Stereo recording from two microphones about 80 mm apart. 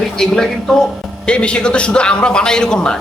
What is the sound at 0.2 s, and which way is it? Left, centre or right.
A man's voice, centre.